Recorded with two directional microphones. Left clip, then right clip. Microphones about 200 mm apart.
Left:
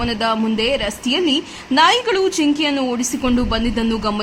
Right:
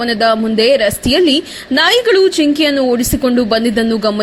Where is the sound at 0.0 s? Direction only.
15° right (ahead or behind).